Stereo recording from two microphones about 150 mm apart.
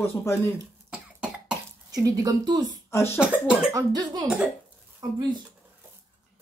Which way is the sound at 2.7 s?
15° left (ahead or behind).